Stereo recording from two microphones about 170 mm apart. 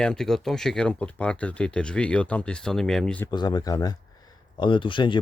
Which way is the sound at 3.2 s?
25° left (ahead or behind).